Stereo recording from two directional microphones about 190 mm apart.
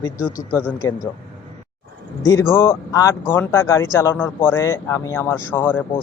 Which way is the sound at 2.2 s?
15° left (ahead or behind).